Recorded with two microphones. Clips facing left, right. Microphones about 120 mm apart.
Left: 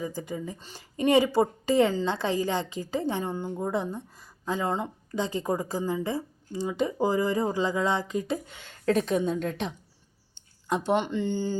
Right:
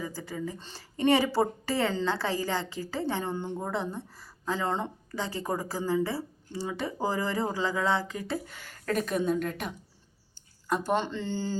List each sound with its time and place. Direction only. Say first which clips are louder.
0.0 s a woman's voice: left 2 dB; 20° left (ahead or behind)
9.0 s a woman's voice: left 2 dB; 50° right (ahead or behind)
10.3 s speech: left 1 dB; 20° left (ahead or behind)